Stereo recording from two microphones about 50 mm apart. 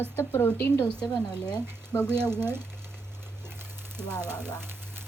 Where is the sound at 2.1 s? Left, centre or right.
Right.